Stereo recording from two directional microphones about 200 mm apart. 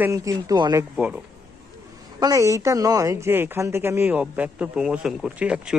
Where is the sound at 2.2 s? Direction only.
15° right (ahead or behind).